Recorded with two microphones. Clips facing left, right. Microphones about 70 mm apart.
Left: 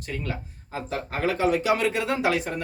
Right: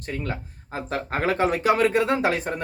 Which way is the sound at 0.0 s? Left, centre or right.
Right.